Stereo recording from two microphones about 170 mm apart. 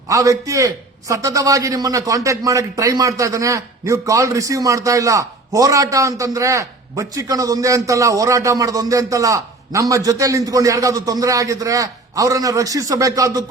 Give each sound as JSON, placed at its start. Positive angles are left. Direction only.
{"t": 0.1, "sound": "a man's voice", "side_deg": -20}